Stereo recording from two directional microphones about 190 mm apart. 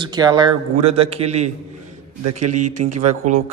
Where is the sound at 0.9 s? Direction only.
30° right (ahead or behind).